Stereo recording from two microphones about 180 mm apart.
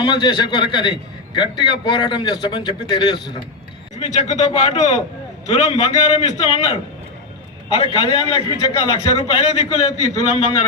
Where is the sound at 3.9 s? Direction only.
40° left (ahead or behind).